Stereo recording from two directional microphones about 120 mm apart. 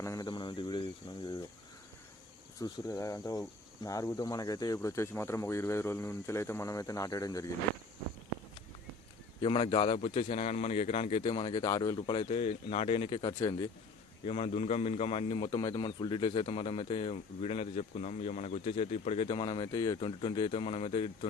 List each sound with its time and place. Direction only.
0.0 s speech: 25° left (ahead or behind)
0.3 s a sound: 40° left (ahead or behind)
2.6 s speech: 35° left (ahead or behind)
9.4 s a man's voice: 50° left (ahead or behind)
14.3 s a man's voice: 60° left (ahead or behind)
19.3 s a man's voice: 40° left (ahead or behind)